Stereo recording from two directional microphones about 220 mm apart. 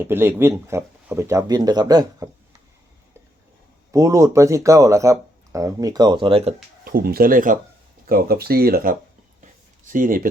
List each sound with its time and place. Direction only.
0.0 s speech: 10° right (ahead or behind)
3.9 s speech: 15° right (ahead or behind)
6.8 s speech: 45° right (ahead or behind)
9.4 s a sound: 35° right (ahead or behind)